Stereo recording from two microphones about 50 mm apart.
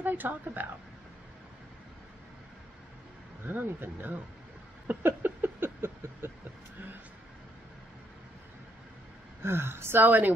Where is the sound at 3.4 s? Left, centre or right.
Right.